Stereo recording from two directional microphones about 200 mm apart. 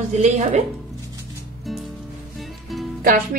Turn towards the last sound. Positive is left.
turn(degrees=-45)  # may be behind; listen again after turning